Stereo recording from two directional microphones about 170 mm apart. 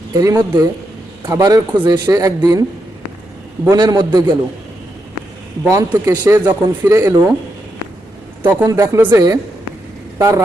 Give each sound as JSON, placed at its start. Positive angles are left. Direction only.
{"t": 0.1, "sound": "speech", "side_deg": -20}
{"t": 3.7, "sound": "speech", "side_deg": -25}
{"t": 5.6, "sound": "speech", "side_deg": -15}
{"t": 8.4, "sound": "speech", "side_deg": -20}